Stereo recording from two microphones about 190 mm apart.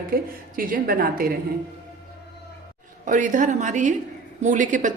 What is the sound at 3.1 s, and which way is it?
A woman's voice, 45° right (ahead or behind).